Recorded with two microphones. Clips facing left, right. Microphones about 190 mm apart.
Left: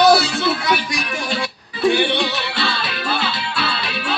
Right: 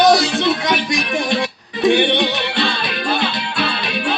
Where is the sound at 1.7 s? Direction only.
20° right (ahead or behind).